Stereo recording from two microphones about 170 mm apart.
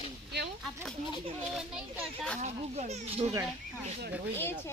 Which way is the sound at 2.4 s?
45° right (ahead or behind).